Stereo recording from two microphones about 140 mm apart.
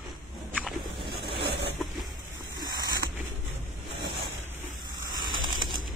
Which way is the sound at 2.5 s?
30° right (ahead or behind).